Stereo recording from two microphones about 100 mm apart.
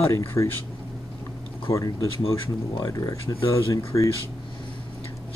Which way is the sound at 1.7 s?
35° left (ahead or behind).